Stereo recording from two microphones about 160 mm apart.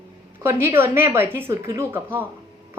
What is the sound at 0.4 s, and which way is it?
A woman's voice, 15° right (ahead or behind).